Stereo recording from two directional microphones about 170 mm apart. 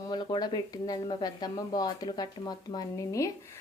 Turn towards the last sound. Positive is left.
turn(degrees=20)  # may be behind; listen again after turning